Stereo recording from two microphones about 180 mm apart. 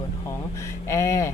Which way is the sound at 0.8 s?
15° left (ahead or behind).